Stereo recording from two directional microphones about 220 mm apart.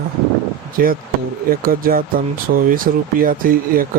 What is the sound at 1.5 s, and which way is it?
Speech, 40° right (ahead or behind).